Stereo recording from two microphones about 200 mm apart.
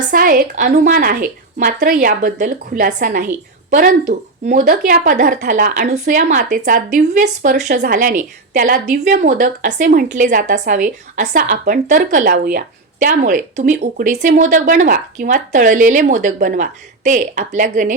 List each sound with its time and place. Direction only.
0.1 s a woman's voice: 45° right (ahead or behind)